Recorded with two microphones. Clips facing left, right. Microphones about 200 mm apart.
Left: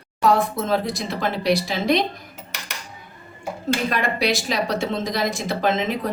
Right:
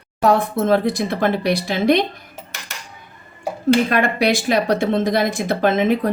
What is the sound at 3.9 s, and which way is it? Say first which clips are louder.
Speech: right 5 dB; 55° right (ahead or behind).